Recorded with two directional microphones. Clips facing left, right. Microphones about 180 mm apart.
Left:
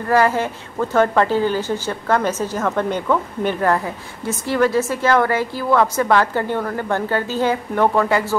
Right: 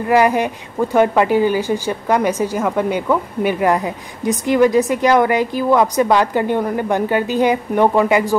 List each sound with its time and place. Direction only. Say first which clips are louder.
0.1 s speech: right 2 dB; 15° right (ahead or behind)